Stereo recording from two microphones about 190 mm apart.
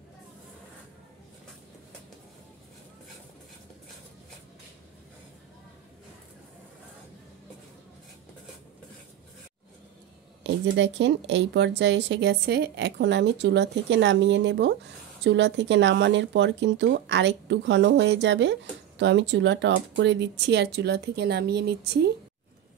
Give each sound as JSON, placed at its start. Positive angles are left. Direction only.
{"t": 10.4, "sound": "speech", "side_deg": -70}